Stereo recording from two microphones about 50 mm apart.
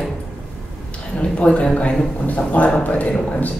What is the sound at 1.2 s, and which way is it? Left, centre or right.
Speech, left.